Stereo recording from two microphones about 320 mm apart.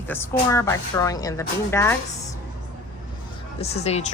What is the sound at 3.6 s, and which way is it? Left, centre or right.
Speech, centre.